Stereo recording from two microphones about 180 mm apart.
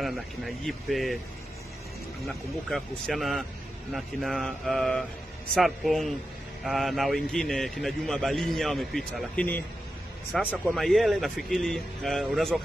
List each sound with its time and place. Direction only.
0.0 s a man's voice: centre (ahead or behind)
2.2 s a man's voice: centre (ahead or behind)